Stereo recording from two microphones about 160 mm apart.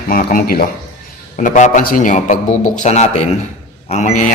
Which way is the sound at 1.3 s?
55° left (ahead or behind).